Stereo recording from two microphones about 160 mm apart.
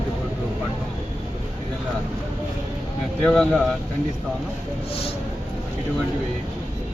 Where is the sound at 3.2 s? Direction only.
5° left (ahead or behind).